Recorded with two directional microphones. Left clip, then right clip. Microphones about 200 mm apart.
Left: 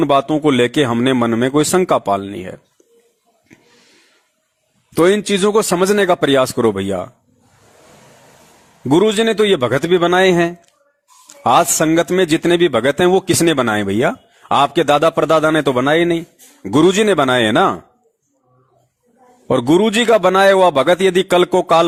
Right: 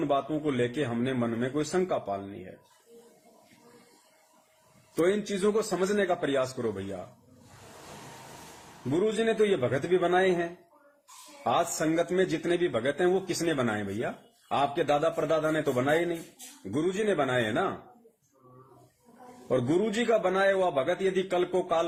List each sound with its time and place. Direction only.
0.0 s a man's voice: 55° left (ahead or behind)
4.9 s a man's voice: 50° left (ahead or behind)
9.0 s a man's voice: 50° left (ahead or behind)
19.5 s a man's voice: 55° left (ahead or behind)